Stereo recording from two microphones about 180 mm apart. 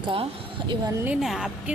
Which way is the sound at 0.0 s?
30° right (ahead or behind).